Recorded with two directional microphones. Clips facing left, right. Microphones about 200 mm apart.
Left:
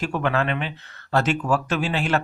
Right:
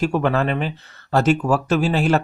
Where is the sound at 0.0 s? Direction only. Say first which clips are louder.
Right 4 dB; 40° right (ahead or behind).